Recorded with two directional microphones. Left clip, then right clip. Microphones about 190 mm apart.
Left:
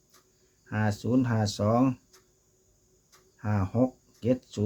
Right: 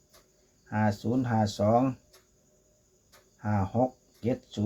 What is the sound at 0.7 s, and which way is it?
Speech, 55° left (ahead or behind).